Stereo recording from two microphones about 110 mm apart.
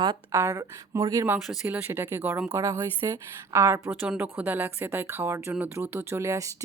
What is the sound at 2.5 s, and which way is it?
Speech, 30° right (ahead or behind).